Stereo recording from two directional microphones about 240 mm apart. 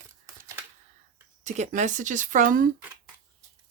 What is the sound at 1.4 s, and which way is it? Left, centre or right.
Speech, right.